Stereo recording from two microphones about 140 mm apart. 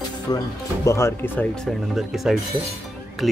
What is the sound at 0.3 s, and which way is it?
Speech, 30° left (ahead or behind).